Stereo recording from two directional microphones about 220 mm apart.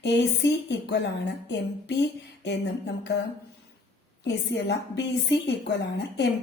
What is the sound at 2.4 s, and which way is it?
Speech, 50° left (ahead or behind).